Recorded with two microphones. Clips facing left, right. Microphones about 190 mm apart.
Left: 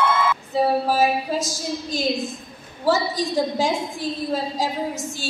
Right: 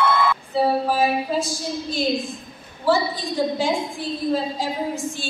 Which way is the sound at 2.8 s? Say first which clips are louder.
Even; 40° left (ahead or behind).